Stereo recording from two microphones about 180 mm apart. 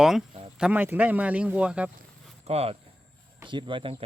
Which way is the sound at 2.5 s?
35° right (ahead or behind).